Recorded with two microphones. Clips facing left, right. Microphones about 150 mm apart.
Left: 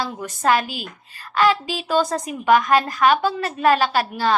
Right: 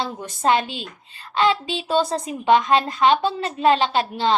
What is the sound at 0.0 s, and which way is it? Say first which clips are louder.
A woman's voice: even; 25° right (ahead or behind).